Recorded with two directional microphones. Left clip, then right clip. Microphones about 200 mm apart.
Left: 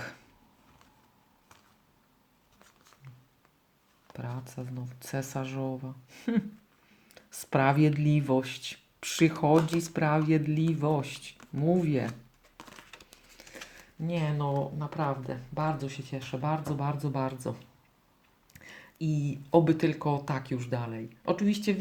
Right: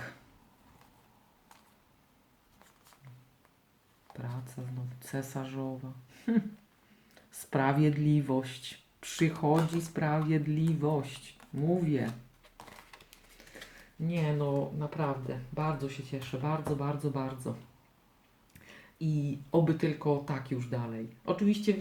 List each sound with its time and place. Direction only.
4.6 s speech: 40° left (ahead or behind)
13.5 s a sound: 45° left (ahead or behind)
14.1 s speech: 40° left (ahead or behind)
18.5 s speech: 40° left (ahead or behind)